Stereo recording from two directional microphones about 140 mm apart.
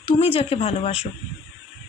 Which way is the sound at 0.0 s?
40° left (ahead or behind).